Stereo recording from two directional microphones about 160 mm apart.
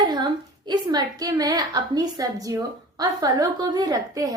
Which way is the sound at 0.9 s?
25° right (ahead or behind).